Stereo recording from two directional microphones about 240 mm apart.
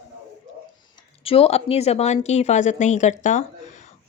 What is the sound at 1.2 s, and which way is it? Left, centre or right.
A woman's voice, left.